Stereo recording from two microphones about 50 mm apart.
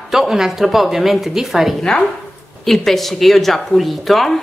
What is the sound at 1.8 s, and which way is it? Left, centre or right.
A woman's voice, centre.